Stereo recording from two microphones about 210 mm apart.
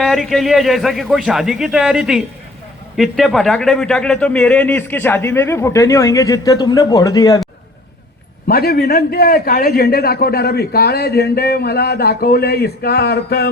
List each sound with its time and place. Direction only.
0.0 s a man's voice: centre (ahead or behind); by 7.4 s 20° left (ahead or behind)
8.4 s a man's voice: 45° left (ahead or behind)